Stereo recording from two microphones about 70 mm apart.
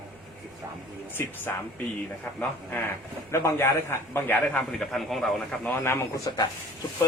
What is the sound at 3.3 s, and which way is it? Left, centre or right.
A man's voice, left.